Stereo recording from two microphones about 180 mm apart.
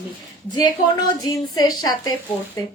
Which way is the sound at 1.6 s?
20° left (ahead or behind).